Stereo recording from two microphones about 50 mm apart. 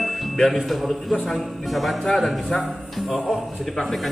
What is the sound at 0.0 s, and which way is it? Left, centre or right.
Music, centre.